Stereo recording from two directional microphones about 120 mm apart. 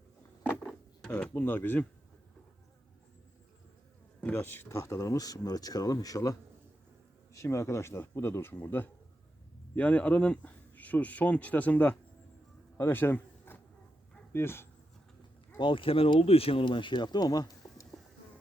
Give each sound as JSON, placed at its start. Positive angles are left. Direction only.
{"t": 0.6, "sound": "a sound", "side_deg": 5}
{"t": 1.3, "sound": "speech", "side_deg": 15}
{"t": 4.2, "sound": "speech", "side_deg": 15}
{"t": 7.3, "sound": "speech", "side_deg": 25}
{"t": 12.7, "sound": "a sound", "side_deg": 20}
{"t": 14.3, "sound": "speech", "side_deg": 20}
{"t": 15.5, "sound": "speech", "side_deg": 45}